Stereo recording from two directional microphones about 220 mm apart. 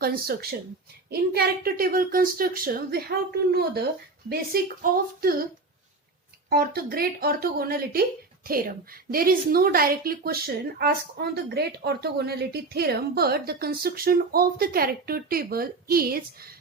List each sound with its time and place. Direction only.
0.0 s a woman's voice: 45° right (ahead or behind)
6.5 s a woman's voice: 45° right (ahead or behind)